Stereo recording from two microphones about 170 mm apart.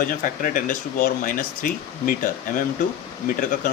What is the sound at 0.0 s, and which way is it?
Speech, 55° left (ahead or behind).